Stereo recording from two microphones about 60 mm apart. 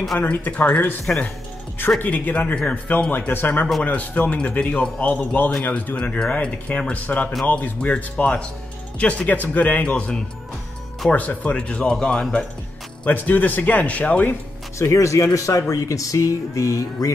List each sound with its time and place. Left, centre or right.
0.2 s speech: left
2.0 s speech: left
3.1 s speech: left
5.5 s speech: centre
13.0 s speech: left
14.8 s speech: left